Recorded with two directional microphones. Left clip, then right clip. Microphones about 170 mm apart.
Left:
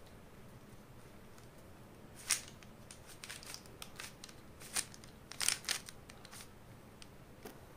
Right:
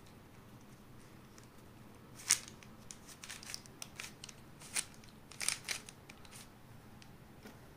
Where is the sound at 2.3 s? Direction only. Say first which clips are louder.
Right 3 dB; 5° right (ahead or behind).